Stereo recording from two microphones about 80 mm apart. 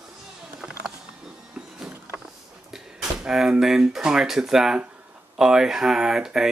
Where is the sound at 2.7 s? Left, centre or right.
Centre.